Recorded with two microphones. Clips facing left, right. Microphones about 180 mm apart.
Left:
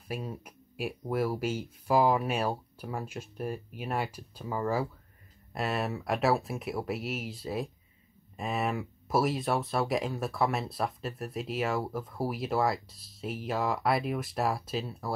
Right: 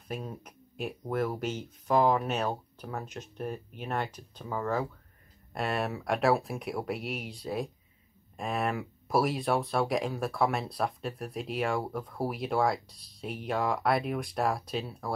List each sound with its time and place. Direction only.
0.1 s speech: 5° left (ahead or behind)